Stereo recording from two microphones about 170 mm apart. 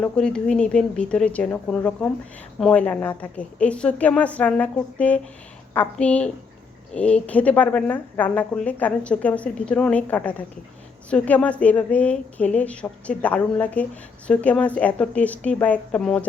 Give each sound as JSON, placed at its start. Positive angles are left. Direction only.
{"t": 0.0, "sound": "speech", "side_deg": 5}